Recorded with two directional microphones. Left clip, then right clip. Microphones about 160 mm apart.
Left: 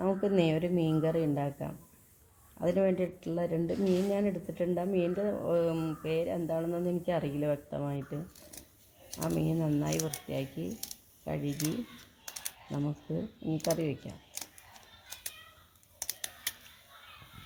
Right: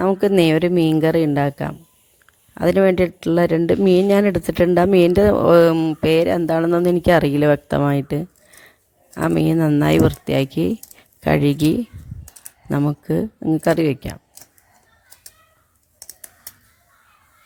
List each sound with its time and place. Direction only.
0.0 s a woman's voice: 65° right (ahead or behind); by 8.2 s 90° right
9.3 s speech: 80° right
13.1 s a woman's voice: 85° right